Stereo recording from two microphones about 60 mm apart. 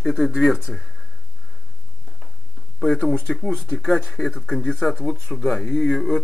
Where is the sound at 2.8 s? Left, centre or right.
Centre.